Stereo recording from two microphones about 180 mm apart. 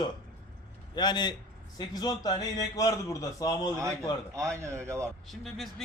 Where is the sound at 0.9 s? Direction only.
25° left (ahead or behind).